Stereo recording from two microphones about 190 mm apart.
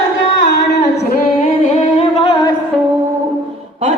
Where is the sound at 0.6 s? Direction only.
65° left (ahead or behind).